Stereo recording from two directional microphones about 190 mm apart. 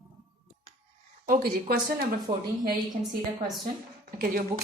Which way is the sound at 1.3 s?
50° right (ahead or behind).